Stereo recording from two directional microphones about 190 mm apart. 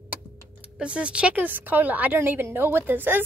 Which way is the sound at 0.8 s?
5° right (ahead or behind).